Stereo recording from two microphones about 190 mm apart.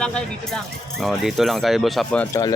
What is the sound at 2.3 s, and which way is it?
Speech, 20° left (ahead or behind).